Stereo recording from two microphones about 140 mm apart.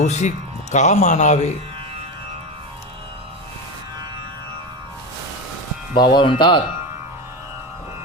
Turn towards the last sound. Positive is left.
turn(degrees=35)  # may be behind; listen again after turning